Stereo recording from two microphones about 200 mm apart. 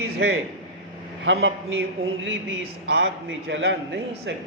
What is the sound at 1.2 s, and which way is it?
Speech, 70° right (ahead or behind).